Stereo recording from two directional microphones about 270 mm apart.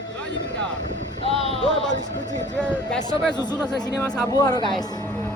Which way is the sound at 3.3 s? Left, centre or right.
Centre.